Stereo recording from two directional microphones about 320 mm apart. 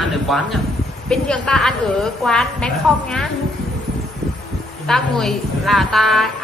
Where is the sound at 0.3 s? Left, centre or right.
Centre.